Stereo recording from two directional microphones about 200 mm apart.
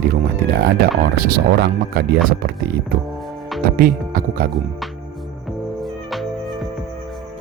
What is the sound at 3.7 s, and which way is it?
Speech, 45° right (ahead or behind).